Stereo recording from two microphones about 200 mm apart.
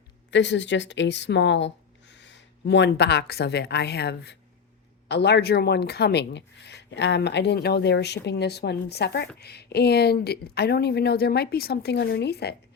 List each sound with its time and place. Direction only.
0.3 s speech: 65° left (ahead or behind)